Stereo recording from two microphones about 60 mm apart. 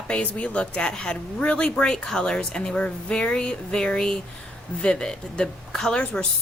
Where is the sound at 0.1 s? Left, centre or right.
Centre.